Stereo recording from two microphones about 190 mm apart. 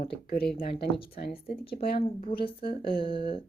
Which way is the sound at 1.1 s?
50° left (ahead or behind).